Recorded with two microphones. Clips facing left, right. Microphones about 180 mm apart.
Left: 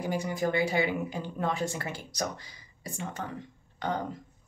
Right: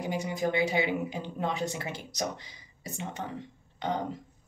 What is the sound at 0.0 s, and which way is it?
Speech, 20° right (ahead or behind).